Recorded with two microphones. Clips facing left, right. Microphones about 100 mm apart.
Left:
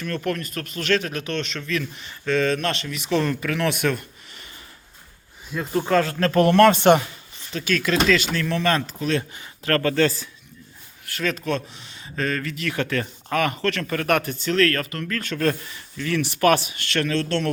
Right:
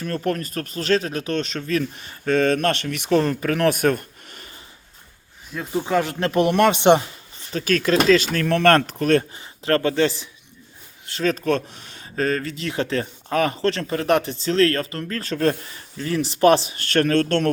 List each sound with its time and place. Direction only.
0.3 s speech: 35° right (ahead or behind); by 3.1 s 55° right (ahead or behind)
3.1 s speech: 40° right (ahead or behind)
5.5 s speech: centre (ahead or behind)
5.8 s speech: 15° right (ahead or behind)
7.5 s speech: 40° right (ahead or behind)
9.3 s speech: 25° right (ahead or behind)
11.0 s a sound: 25° right (ahead or behind)
11.3 s speech: 45° right (ahead or behind)